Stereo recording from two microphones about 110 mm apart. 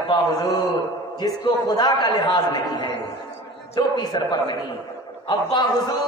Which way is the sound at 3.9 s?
40° left (ahead or behind).